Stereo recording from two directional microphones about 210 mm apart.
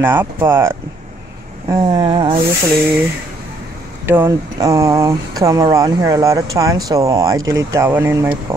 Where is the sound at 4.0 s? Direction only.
10° right (ahead or behind).